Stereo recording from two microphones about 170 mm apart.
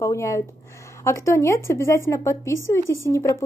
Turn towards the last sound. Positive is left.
turn(degrees=15)  # may be behind; listen again after turning